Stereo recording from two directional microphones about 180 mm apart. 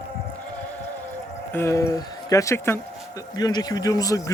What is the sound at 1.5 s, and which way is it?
Speech, 15° left (ahead or behind).